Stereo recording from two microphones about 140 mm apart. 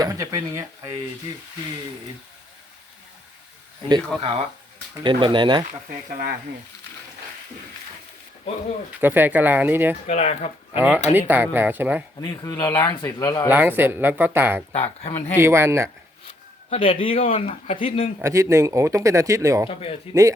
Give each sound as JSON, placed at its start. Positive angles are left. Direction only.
{"t": 0.0, "sound": "speech", "side_deg": -25}
{"t": 3.8, "sound": "speech", "side_deg": -30}
{"t": 8.9, "sound": "speech", "side_deg": -15}
{"t": 10.1, "sound": "speech", "side_deg": 55}
{"t": 10.8, "sound": "speech", "side_deg": -15}
{"t": 12.2, "sound": "speech", "side_deg": 25}
{"t": 13.5, "sound": "speech", "side_deg": -15}
{"t": 14.7, "sound": "speech", "side_deg": 45}
{"t": 15.4, "sound": "speech", "side_deg": -15}
{"t": 16.6, "sound": "a man's voice", "side_deg": 45}
{"t": 18.2, "sound": "speech", "side_deg": -20}
{"t": 19.6, "sound": "speech", "side_deg": 45}